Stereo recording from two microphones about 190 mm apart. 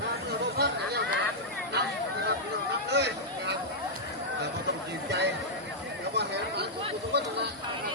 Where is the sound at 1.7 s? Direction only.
60° right (ahead or behind).